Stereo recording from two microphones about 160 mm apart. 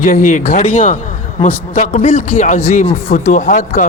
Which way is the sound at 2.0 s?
45° left (ahead or behind).